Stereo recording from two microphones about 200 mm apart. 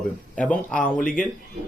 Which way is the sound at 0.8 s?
40° left (ahead or behind).